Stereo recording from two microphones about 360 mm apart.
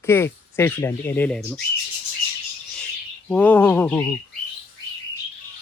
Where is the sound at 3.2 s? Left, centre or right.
Centre.